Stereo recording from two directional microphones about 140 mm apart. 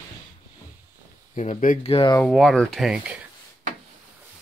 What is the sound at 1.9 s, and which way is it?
Speech, 40° left (ahead or behind).